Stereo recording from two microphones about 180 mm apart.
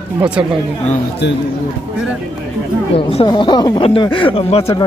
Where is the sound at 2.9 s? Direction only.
30° left (ahead or behind).